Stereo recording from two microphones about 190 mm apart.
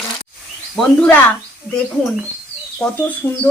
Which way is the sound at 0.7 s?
5° left (ahead or behind).